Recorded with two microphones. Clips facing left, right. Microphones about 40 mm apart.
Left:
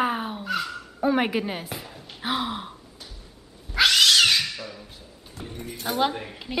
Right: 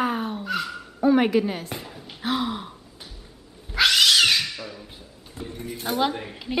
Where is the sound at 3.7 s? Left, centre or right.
Centre.